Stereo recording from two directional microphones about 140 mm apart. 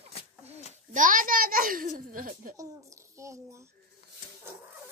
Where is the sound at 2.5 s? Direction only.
20° right (ahead or behind).